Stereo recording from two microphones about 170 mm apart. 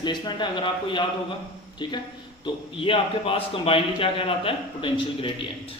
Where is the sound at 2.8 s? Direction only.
30° left (ahead or behind).